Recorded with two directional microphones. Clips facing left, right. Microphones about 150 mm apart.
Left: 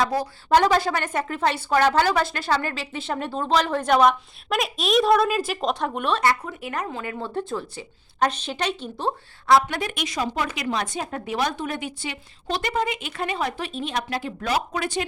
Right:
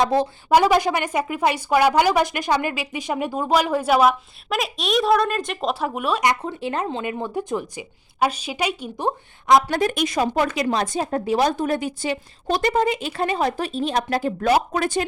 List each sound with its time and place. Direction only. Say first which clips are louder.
0.0 s a woman's voice: right 4 dB; 25° right (ahead or behind)
0.5 s a woman's voice: right 2 dB; 10° right (ahead or behind)
6.4 s a woman's voice: right 5 dB; 30° right (ahead or behind)
9.6 s a woman's voice: right 7 dB; 40° right (ahead or behind)